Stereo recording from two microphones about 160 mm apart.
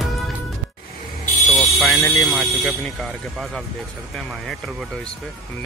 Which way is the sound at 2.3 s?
5° left (ahead or behind).